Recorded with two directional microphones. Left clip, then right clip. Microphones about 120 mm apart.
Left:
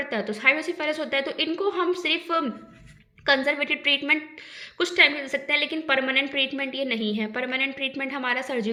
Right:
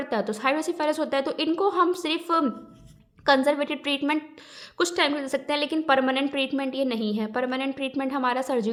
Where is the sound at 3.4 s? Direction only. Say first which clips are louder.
Left 1 dB; 40° right (ahead or behind).